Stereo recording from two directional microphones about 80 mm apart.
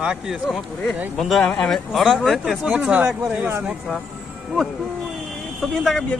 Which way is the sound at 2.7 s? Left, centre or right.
Centre.